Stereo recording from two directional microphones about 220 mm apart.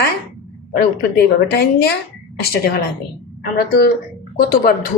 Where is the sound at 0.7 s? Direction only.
50° left (ahead or behind).